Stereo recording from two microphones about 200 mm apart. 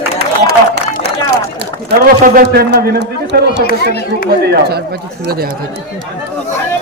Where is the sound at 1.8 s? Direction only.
50° right (ahead or behind).